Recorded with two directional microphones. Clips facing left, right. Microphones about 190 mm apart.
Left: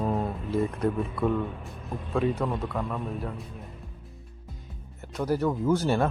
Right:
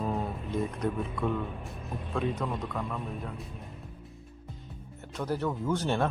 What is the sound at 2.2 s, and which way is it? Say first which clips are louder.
Speech: left 5 dB; 5° left (ahead or behind).